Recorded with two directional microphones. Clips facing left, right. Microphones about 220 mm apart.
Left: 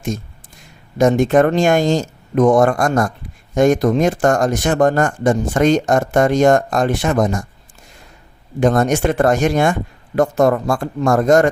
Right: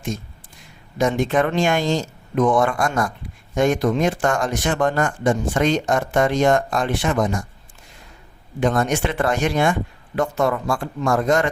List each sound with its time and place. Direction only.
0.9 s speech: 45° left (ahead or behind)
8.6 s speech: 45° left (ahead or behind)